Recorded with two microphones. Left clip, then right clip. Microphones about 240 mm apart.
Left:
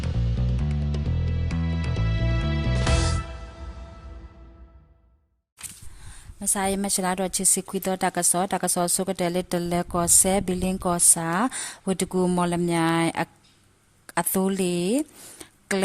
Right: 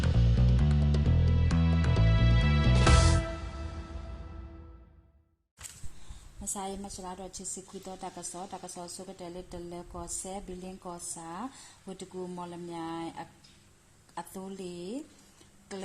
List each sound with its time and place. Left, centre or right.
0.0 s music: centre
6.4 s a woman's voice: left